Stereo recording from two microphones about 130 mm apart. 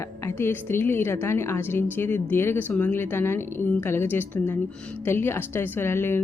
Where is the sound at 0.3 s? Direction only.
20° left (ahead or behind).